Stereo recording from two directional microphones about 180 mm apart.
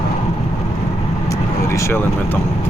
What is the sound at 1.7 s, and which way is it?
Speech, 15° left (ahead or behind).